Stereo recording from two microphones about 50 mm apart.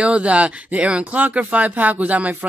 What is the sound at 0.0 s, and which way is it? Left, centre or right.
Speech, right.